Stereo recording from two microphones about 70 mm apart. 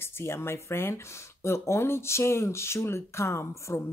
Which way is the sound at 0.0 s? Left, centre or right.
Left.